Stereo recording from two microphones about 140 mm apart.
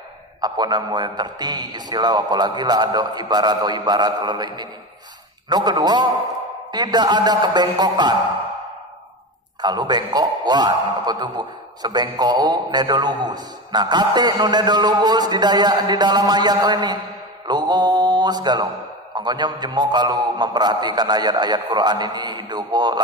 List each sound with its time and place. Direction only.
0.4 s a man's voice: 30° right (ahead or behind)
9.6 s a man's voice: 30° right (ahead or behind)
17.5 s mantra: 30° right (ahead or behind)
19.1 s a man's voice: 30° right (ahead or behind)